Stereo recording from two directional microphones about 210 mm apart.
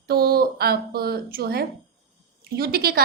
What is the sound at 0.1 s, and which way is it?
A woman's voice, 45° right (ahead or behind).